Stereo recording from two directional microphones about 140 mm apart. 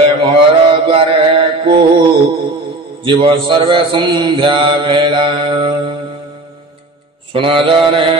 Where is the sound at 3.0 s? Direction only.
40° right (ahead or behind).